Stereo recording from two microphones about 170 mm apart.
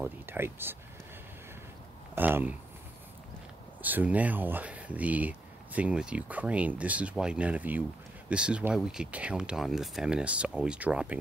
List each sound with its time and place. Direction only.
0.0 s speech: 15° right (ahead or behind)
2.1 s speech: 10° right (ahead or behind)
3.8 s speech: 10° right (ahead or behind)